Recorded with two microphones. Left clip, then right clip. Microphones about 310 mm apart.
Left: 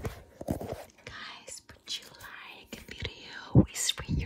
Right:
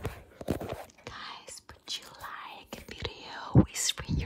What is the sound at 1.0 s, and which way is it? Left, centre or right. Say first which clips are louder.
Whispering: right 1 dB; centre.